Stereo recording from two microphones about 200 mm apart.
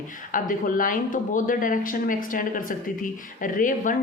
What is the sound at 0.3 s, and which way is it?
A woman's voice, 40° left (ahead or behind).